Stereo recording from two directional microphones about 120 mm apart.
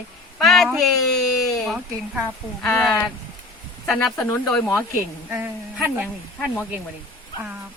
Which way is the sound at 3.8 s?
15° left (ahead or behind).